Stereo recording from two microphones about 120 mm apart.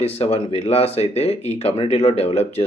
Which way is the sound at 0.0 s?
60° left (ahead or behind).